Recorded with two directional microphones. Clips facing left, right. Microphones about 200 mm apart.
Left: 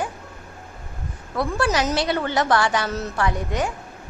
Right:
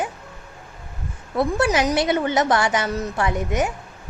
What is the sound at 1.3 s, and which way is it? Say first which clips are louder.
A woman's voice: right 3 dB; 20° right (ahead or behind).